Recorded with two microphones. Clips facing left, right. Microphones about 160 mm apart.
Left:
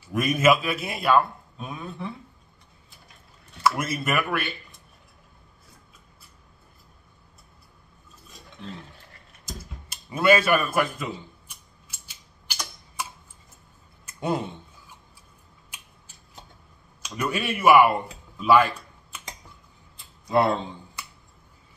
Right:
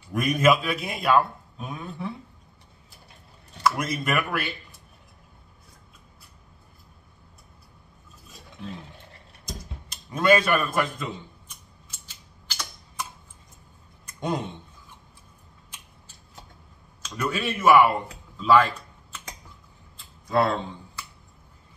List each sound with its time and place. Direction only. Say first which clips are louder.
0.0 s a man's voice: even; 5° left (ahead or behind)
3.6 s a man's voice: even; 5° left (ahead or behind)
9.5 s a sound: right 1 dB; 5° left (ahead or behind)
12.4 s typewriter: left 1 dB; 15° left (ahead or behind)
14.0 s a sound: left 2 dB; 5° left (ahead or behind)
17.0 s speech: even; 10° left (ahead or behind)
18.4 s computer keyboard: even; 10° left (ahead or behind)
20.2 s speech: left 1 dB; 15° left (ahead or behind)